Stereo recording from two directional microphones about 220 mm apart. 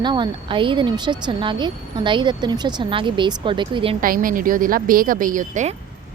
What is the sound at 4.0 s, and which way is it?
A woman's voice, 40° right (ahead or behind).